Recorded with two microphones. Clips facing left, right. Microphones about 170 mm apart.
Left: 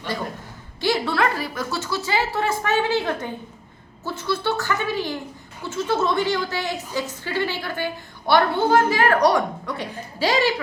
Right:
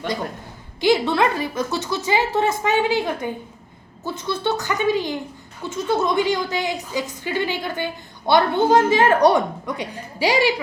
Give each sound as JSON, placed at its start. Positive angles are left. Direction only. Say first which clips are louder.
{"t": 0.8, "sound": "a woman's voice", "louder": "right 4 dB", "side_deg": -20}